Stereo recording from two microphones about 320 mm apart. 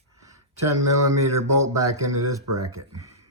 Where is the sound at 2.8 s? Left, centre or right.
Right.